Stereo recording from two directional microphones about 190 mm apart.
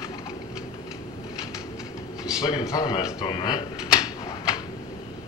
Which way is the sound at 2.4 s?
20° left (ahead or behind).